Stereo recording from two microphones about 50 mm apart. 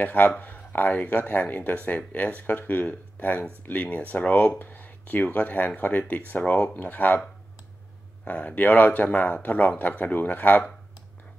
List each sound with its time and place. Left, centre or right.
0.0 s speech: left
8.3 s speech: left